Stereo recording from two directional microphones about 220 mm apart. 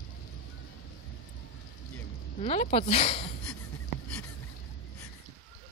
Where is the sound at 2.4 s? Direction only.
30° left (ahead or behind).